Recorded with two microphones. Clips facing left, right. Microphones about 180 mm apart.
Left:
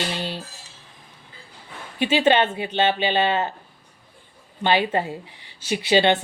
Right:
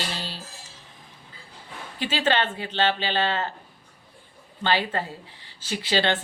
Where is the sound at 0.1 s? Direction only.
20° left (ahead or behind).